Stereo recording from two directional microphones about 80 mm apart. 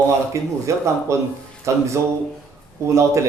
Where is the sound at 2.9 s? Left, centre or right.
Right.